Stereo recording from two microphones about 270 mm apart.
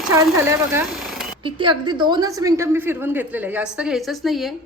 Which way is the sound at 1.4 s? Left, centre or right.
Centre.